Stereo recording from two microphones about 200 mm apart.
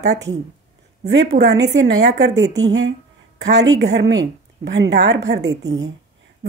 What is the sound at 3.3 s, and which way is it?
A woman's voice, 60° right (ahead or behind).